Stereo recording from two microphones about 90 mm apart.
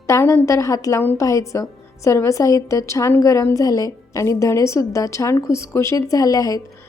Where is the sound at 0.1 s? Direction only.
25° left (ahead or behind).